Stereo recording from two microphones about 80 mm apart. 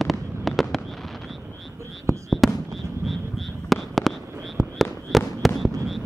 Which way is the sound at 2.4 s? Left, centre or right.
Centre.